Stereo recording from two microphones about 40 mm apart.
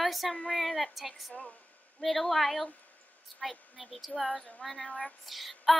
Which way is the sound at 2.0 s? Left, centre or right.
Centre.